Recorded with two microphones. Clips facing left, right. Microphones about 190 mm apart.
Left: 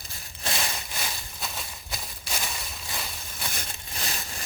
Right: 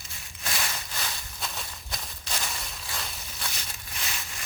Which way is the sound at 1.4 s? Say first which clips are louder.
Right 1 dB; 5° left (ahead or behind).